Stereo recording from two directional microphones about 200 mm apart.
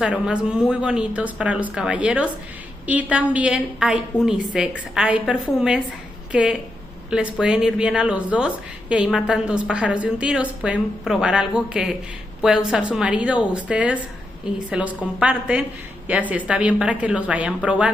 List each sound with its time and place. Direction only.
0.0 s a woman's voice: 5° right (ahead or behind)